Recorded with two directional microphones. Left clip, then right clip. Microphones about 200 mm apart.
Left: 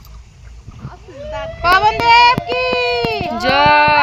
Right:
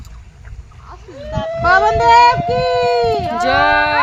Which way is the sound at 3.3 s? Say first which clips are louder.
Left 3 dB; centre (ahead or behind).